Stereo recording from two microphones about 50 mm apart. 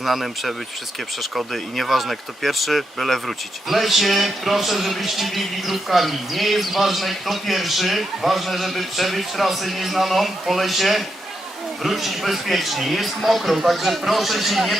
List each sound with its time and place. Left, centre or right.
0.0 s speech: centre